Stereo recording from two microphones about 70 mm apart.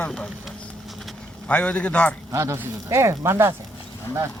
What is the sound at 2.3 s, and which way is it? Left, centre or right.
Speech, right.